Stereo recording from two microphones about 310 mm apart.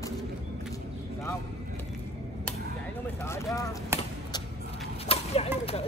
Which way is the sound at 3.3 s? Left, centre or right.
Centre.